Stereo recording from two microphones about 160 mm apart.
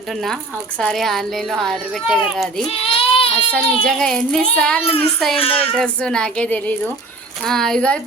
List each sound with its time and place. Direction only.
0.1 s a child's voice: centre (ahead or behind)
2.6 s baby cry: 35° left (ahead or behind)
3.5 s a child's voice: 5° left (ahead or behind)
4.8 s a child's voice: 35° left (ahead or behind)
5.7 s a woman's voice: 5° left (ahead or behind)